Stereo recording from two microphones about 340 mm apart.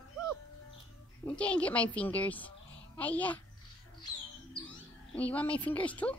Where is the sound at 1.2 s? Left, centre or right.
Centre.